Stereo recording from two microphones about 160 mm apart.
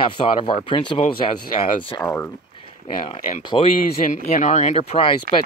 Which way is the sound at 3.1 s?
45° left (ahead or behind).